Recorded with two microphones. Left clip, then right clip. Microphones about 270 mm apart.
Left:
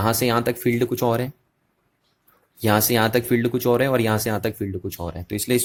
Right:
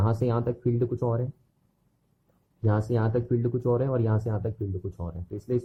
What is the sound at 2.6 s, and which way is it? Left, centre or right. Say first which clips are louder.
Speech: left 9 dB; left.